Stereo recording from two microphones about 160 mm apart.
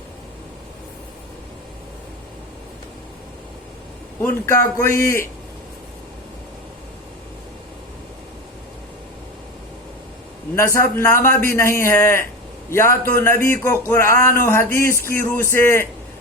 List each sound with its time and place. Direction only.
4.2 s speech: 15° left (ahead or behind)
10.5 s speech: 15° left (ahead or behind)